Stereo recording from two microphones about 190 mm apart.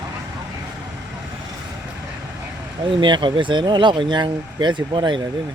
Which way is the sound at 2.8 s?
25° right (ahead or behind).